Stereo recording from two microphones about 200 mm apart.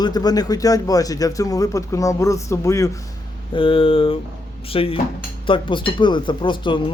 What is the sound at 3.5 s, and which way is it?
Speech, 25° left (ahead or behind).